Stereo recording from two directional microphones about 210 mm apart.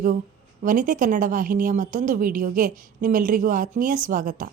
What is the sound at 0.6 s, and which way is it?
A woman's voice, 40° right (ahead or behind).